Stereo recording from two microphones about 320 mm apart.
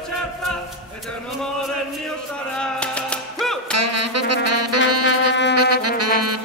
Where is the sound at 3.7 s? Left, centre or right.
Right.